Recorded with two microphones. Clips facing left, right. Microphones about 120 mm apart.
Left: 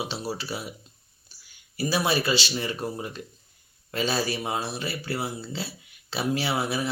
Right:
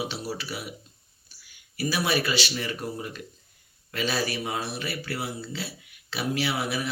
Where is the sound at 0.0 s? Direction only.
30° left (ahead or behind).